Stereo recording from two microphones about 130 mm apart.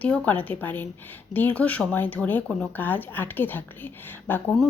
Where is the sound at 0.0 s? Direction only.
10° left (ahead or behind).